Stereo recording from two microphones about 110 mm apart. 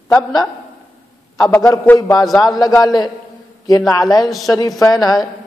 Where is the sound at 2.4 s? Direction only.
35° left (ahead or behind).